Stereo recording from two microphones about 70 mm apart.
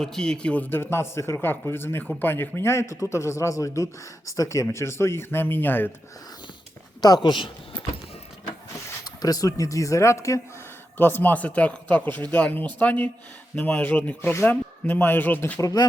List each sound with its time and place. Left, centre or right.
0.0 s a man's voice: centre; by 5.9 s left
7.0 s speech: left
9.0 s a man's voice: left
10.9 s speech: left
15.6 s speech: left